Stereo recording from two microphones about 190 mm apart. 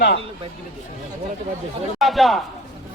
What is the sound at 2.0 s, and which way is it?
Speech, centre (ahead or behind).